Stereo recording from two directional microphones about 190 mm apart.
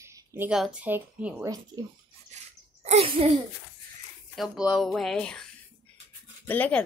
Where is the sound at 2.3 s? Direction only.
40° right (ahead or behind).